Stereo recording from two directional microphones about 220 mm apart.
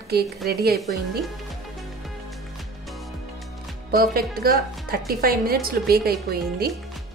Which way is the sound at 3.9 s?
45° right (ahead or behind).